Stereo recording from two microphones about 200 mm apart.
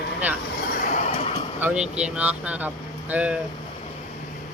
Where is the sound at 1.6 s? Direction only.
5° right (ahead or behind).